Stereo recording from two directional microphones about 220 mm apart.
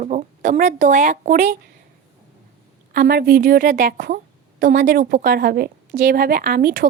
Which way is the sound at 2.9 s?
45° right (ahead or behind).